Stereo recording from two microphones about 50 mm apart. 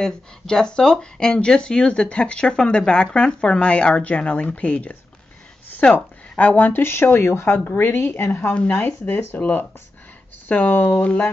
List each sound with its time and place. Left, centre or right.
0.0 s speech: centre
5.9 s speech: left
6.8 s speech: left
7.4 s speech: left
7.7 s speech: left